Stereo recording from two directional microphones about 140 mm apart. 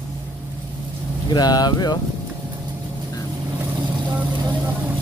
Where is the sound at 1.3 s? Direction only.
30° left (ahead or behind).